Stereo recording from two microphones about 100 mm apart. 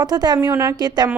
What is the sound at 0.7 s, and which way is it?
Speech, 45° right (ahead or behind).